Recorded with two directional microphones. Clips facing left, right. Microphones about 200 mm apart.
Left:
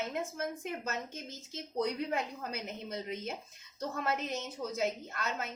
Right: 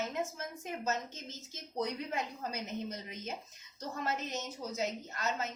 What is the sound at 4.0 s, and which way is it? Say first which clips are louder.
A woman's voice: left 1 dB; 55° left (ahead or behind).